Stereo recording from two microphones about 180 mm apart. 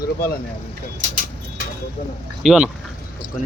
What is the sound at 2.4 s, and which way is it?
Speech, 5° right (ahead or behind).